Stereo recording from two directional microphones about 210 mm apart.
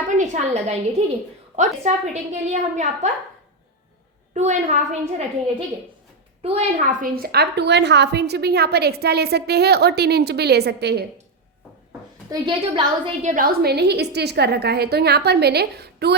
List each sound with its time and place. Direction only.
0.2 s a woman's voice: 30° right (ahead or behind)
4.4 s a woman's voice: 35° right (ahead or behind); by 11.0 s 50° right (ahead or behind)
12.3 s a woman's voice: 25° right (ahead or behind)
13.2 s a woman's voice: 40° right (ahead or behind)